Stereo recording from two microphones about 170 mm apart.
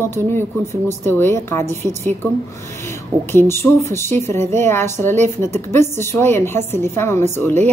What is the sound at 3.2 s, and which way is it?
A woman's voice, 15° left (ahead or behind).